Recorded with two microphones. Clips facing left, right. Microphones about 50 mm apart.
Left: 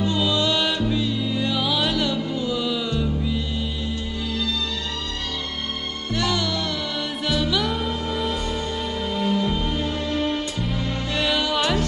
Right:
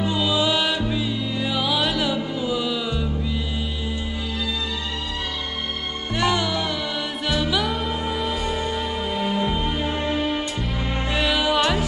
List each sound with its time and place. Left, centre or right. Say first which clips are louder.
0.0 s music: even; centre
6.1 s music: right 2 dB; centre
10.2 s music: even; centre